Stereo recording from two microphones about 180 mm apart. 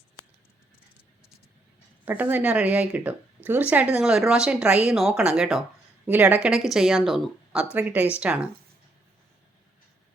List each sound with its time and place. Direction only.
2.0 s speech: 10° right (ahead or behind)